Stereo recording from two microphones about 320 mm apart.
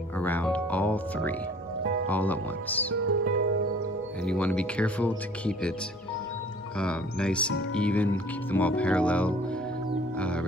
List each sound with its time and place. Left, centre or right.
0.2 s music: centre
2.0 s speech: centre
3.0 s speech: right
4.2 s speech: centre
6.8 s speech: centre
10.1 s music: centre